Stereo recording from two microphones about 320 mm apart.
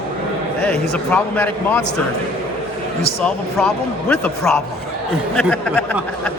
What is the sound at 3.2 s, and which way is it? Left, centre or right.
A man's voice, centre.